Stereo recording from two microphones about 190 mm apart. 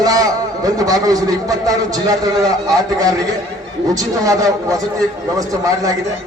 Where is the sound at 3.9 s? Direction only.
20° right (ahead or behind).